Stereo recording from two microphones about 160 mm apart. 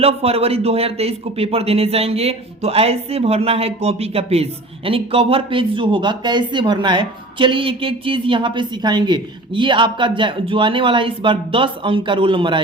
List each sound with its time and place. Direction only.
0.0 s speech: 40° right (ahead or behind)